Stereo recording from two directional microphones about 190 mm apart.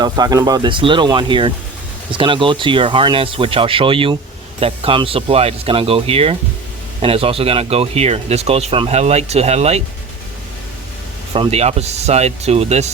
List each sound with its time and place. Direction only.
0.0 s speech: 20° right (ahead or behind); by 9.8 s 35° right (ahead or behind)
11.3 s speech: 35° right (ahead or behind)